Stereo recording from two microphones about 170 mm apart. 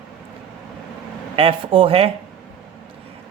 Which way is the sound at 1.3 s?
30° right (ahead or behind).